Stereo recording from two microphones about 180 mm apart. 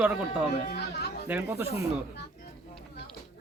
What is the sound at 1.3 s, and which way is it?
Speech, 15° right (ahead or behind).